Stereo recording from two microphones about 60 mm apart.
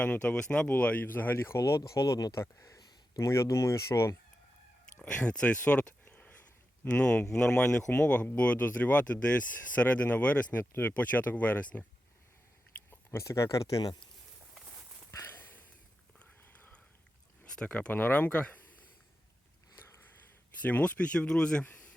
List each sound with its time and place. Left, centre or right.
0.0 s speech: left
1.4 s speech: left
2.4 s speech: left
5.0 s speech: centre
13.1 s speech: left
15.3 s a sound: left
17.4 s a sound: centre
17.9 s speech: left
20.6 s speech: left